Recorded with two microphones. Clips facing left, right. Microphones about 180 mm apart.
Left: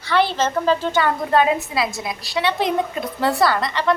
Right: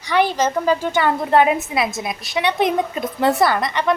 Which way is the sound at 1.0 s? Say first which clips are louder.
Right 4 dB; 25° right (ahead or behind).